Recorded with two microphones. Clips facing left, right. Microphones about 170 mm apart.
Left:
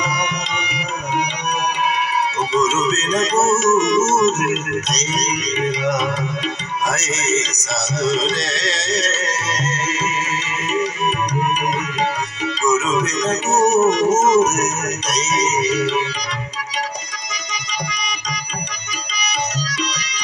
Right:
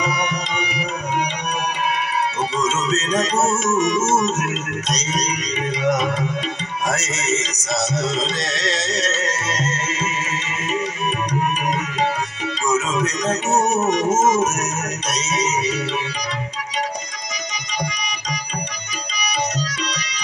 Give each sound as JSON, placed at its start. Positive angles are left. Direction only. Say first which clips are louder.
{"t": 2.5, "sound": "music", "louder": "left 6 dB", "side_deg": -50}
{"t": 12.6, "sound": "music", "louder": "left 2 dB", "side_deg": -50}
{"t": 19.1, "sound": "tabla", "louder": "right 1 dB", "side_deg": -50}